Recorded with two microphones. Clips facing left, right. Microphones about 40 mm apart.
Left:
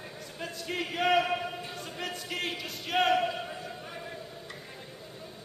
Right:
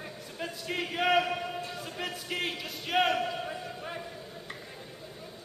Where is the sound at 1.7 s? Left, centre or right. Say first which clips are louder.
Even; centre.